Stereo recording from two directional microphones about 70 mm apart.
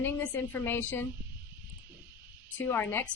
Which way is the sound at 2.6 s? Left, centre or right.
Left.